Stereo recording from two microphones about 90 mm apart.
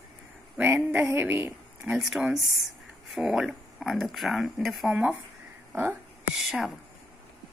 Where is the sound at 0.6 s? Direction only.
15° right (ahead or behind).